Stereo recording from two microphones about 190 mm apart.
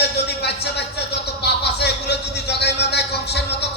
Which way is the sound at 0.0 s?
60° left (ahead or behind).